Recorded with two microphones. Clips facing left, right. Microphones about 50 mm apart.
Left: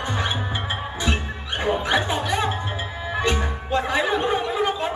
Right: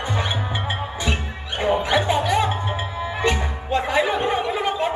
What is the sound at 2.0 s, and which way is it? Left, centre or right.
Music, right.